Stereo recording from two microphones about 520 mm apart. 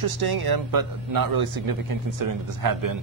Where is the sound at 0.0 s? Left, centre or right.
Right.